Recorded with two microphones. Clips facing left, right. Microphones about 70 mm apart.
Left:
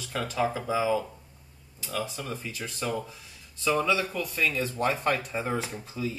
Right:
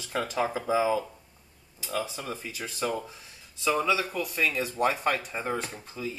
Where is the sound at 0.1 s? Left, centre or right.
Centre.